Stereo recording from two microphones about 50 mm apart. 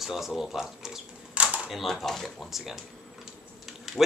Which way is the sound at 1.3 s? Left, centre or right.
Right.